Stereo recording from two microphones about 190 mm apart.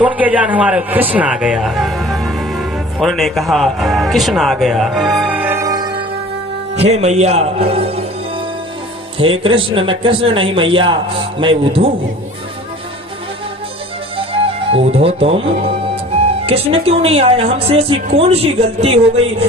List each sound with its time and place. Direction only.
0.0 s a man's voice: 10° right (ahead or behind)
6.8 s speech: 35° right (ahead or behind)
9.1 s a man's voice: 30° right (ahead or behind)
14.7 s speech: 30° right (ahead or behind)